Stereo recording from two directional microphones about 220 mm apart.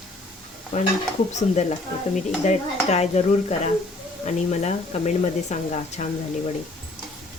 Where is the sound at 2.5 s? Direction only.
30° left (ahead or behind).